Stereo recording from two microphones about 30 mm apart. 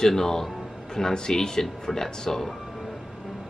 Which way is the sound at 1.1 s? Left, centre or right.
Left.